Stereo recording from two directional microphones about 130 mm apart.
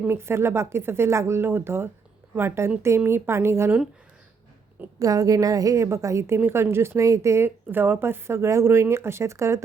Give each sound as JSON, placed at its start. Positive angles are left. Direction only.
{"t": 0.0, "sound": "a woman's voice", "side_deg": -20}
{"t": 4.9, "sound": "a woman's voice", "side_deg": -25}